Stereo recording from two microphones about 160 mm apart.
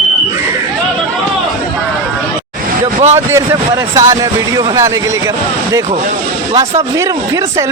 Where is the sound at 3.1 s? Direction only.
20° right (ahead or behind).